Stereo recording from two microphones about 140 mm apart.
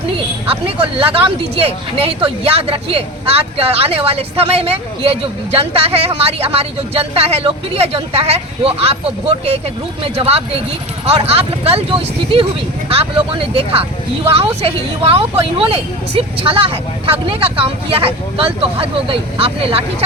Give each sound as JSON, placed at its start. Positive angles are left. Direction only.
{"t": 0.4, "sound": "a woman's voice", "side_deg": -40}